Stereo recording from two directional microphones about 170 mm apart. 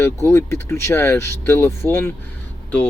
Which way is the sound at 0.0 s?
15° left (ahead or behind).